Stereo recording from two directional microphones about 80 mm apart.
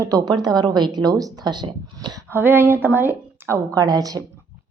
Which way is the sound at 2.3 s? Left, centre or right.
Right.